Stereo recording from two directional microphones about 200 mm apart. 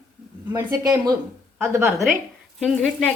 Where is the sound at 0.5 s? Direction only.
20° right (ahead or behind).